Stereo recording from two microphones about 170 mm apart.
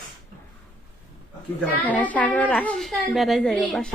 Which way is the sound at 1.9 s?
10° left (ahead or behind).